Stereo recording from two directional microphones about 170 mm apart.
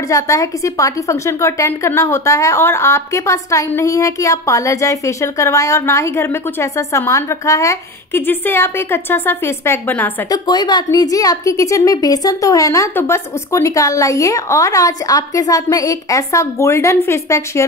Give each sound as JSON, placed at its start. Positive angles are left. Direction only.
{"t": 0.1, "sound": "a woman's voice", "side_deg": 20}
{"t": 10.3, "sound": "a woman's voice", "side_deg": 25}